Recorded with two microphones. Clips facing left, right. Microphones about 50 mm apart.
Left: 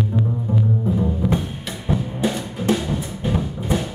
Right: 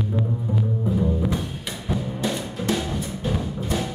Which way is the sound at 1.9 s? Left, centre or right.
Centre.